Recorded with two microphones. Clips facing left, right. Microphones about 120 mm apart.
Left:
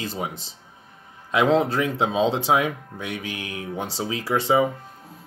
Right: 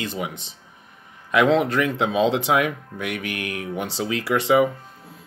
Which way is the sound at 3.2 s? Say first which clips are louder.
Right 3 dB; 75° right (ahead or behind).